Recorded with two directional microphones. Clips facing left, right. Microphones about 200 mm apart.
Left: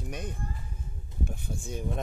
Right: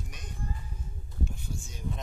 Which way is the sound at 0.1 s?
55° left (ahead or behind).